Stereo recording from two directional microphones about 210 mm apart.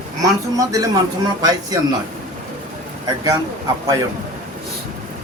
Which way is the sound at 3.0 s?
20° right (ahead or behind).